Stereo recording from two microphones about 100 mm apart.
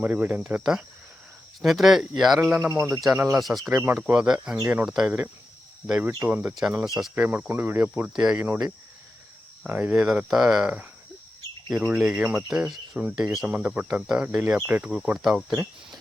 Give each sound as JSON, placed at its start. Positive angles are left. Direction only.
{"t": 0.0, "sound": "speech", "side_deg": -15}
{"t": 2.5, "sound": "speech", "side_deg": -15}
{"t": 2.9, "sound": "speech", "side_deg": 0}
{"t": 7.2, "sound": "speech", "side_deg": -20}
{"t": 8.4, "sound": "speech", "side_deg": -20}
{"t": 9.6, "sound": "speech", "side_deg": -15}
{"t": 9.9, "sound": "speech", "side_deg": -5}
{"t": 11.9, "sound": "speech", "side_deg": -10}